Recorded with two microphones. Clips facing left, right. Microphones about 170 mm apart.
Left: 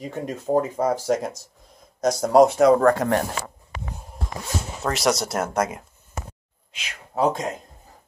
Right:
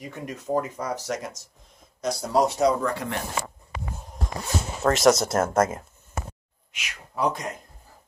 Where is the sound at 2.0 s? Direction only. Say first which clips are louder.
Left 7 dB; 45° left (ahead or behind).